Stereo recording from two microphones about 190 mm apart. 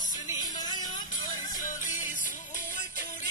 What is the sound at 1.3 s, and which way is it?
Music, 45° left (ahead or behind).